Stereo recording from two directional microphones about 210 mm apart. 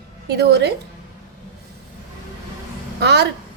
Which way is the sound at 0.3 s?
50° right (ahead or behind).